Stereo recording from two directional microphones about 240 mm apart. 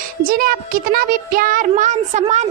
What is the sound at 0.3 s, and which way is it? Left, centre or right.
Speech, right.